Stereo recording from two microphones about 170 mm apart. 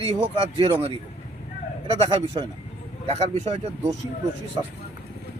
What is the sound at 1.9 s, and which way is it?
Speech, 30° right (ahead or behind).